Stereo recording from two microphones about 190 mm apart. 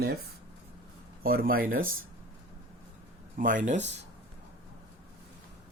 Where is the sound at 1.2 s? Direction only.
50° right (ahead or behind).